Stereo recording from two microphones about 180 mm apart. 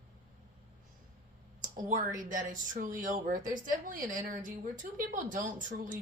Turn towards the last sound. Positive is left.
turn(degrees=-45)  # may be behind; listen again after turning